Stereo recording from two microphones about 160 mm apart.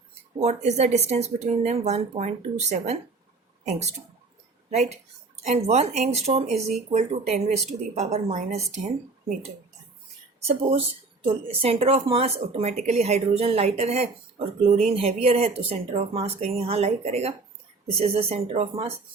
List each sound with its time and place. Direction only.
0.3 s speech: 45° right (ahead or behind)
4.7 s speech: 45° right (ahead or behind)
10.4 s speech: 35° right (ahead or behind)